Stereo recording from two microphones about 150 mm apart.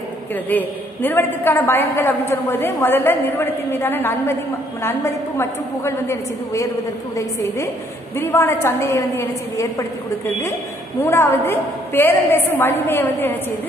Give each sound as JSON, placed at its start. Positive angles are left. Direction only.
{"t": 0.5, "sound": "a woman's voice", "side_deg": 10}
{"t": 11.0, "sound": "a woman's voice", "side_deg": 15}